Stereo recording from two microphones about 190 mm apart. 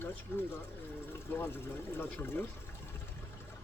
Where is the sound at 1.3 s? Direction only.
10° left (ahead or behind).